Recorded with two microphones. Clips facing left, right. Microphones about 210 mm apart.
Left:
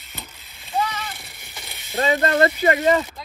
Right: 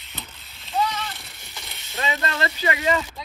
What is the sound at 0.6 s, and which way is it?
Splash, 10° left (ahead or behind).